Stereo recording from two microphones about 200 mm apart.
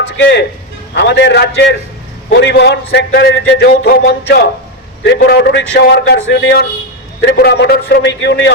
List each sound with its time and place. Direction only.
0.2 s a man's voice: 60° left (ahead or behind)